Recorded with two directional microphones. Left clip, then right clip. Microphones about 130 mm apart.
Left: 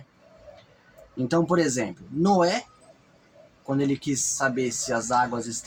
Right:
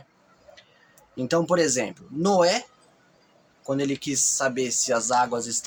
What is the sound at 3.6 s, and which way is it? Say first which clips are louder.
Speech: even; 25° right (ahead or behind).